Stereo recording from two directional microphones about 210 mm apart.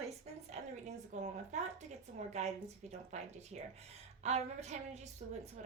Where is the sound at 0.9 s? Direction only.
35° right (ahead or behind).